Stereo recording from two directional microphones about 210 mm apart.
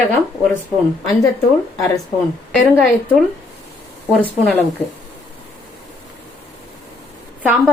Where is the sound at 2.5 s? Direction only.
5° left (ahead or behind).